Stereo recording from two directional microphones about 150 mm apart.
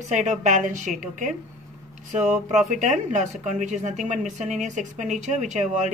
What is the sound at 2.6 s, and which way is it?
A woman's voice, 55° right (ahead or behind).